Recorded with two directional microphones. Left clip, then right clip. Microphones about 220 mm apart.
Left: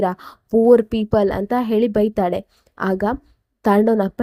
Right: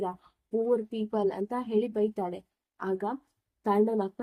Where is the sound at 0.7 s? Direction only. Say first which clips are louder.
Left 17 dB; 35° left (ahead or behind).